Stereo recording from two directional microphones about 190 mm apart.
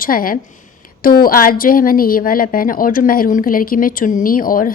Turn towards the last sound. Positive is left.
turn(degrees=45)  # may be behind; listen again after turning